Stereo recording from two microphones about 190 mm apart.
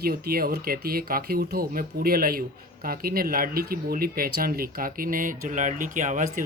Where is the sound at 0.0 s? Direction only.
50° right (ahead or behind).